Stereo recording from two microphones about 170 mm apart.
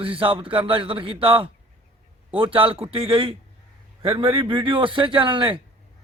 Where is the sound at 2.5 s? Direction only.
30° right (ahead or behind).